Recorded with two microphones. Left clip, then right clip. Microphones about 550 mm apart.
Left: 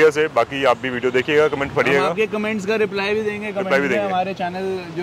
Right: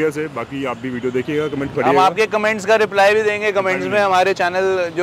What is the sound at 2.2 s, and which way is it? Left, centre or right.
Speech, right.